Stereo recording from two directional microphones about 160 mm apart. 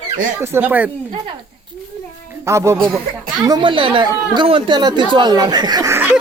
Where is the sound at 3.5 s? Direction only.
30° right (ahead or behind).